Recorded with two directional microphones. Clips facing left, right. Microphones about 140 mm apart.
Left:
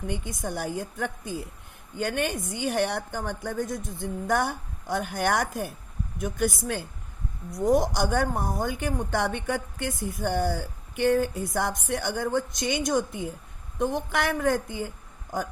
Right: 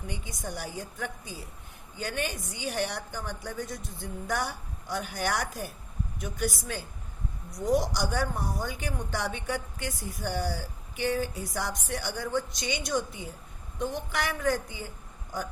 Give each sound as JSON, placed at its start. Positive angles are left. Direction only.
{"t": 0.1, "sound": "speech", "side_deg": 55}